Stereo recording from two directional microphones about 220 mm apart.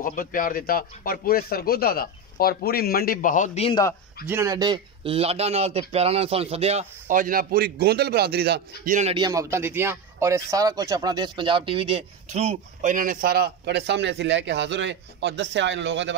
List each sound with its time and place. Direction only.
0.0 s speech: 40° left (ahead or behind)
4.3 s speech: 15° right (ahead or behind); by 8.6 s 45° right (ahead or behind)
8.8 s speech: 35° right (ahead or behind)
9.1 s speech: 15° right (ahead or behind); by 16.2 s 55° right (ahead or behind)